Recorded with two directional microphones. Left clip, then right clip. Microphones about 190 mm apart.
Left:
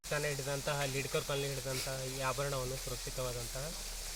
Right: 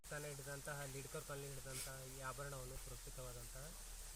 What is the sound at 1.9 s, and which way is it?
Speech, 25° left (ahead or behind).